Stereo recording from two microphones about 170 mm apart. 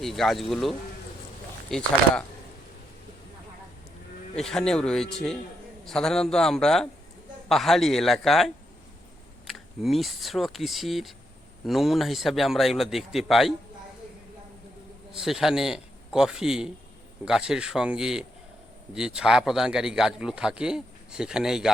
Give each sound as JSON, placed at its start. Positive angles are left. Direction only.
{"t": 0.0, "sound": "a man's voice", "side_deg": 0}
{"t": 4.4, "sound": "a man's voice", "side_deg": 5}
{"t": 9.5, "sound": "a man's voice", "side_deg": 0}
{"t": 15.1, "sound": "a man's voice", "side_deg": 0}